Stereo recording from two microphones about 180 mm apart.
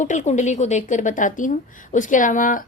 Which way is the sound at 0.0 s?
45° left (ahead or behind).